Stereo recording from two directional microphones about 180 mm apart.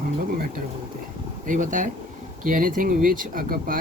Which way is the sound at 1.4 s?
45° right (ahead or behind).